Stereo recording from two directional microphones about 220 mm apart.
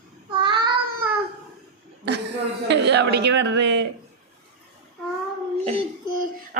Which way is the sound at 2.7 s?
50° right (ahead or behind).